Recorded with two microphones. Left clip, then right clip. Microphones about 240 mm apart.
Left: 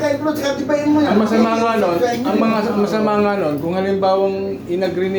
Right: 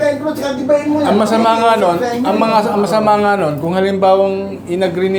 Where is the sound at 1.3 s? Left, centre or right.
Right.